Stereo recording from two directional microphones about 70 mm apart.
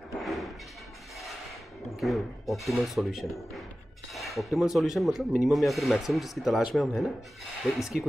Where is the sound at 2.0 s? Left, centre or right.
Centre.